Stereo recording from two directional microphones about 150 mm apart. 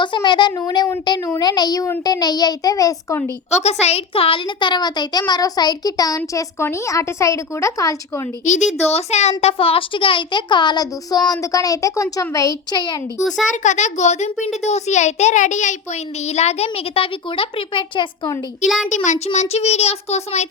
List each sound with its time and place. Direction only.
0.0 s a child's voice: 30° left (ahead or behind)
3.5 s a child's voice: 45° left (ahead or behind); by 8.2 s 20° left (ahead or behind)
8.4 s a child's voice: 55° left (ahead or behind); by 13.0 s 30° left (ahead or behind)
13.2 s a child's voice: 5° left (ahead or behind)
13.5 s a child's voice: 55° left (ahead or behind); by 18.3 s 35° left (ahead or behind)
18.9 s a child's voice: 50° left (ahead or behind)